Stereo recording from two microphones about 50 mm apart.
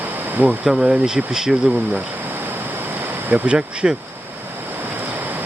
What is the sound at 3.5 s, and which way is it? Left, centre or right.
Speech, right.